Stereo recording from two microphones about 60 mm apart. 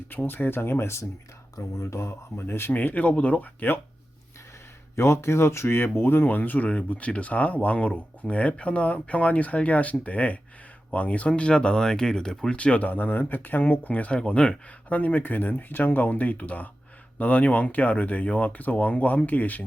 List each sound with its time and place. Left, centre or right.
0.1 s speech: left
1.5 s speech: left
2.7 s speech: left
4.9 s speech: left; by 12.5 s centre
12.5 s speech: left